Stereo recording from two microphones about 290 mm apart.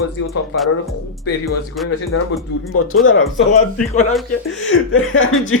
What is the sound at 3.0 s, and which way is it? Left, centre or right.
Speech, left.